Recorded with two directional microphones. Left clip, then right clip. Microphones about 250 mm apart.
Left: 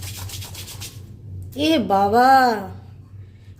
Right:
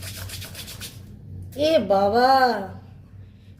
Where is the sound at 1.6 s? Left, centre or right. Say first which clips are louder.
Left 1 dB; left.